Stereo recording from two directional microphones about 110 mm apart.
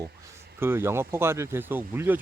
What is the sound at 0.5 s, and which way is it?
Speech, 20° right (ahead or behind).